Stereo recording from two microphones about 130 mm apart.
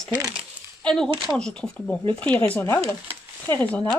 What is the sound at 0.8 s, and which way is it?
Speech, 5° left (ahead or behind).